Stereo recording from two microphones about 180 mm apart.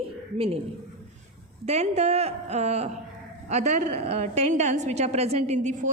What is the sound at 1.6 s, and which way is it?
A woman's voice, 40° right (ahead or behind).